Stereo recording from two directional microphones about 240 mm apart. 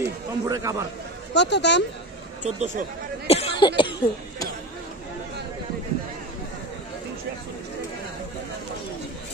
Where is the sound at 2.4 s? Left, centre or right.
Right.